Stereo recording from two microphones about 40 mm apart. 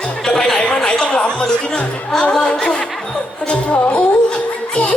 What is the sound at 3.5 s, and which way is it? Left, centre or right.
Speech, left.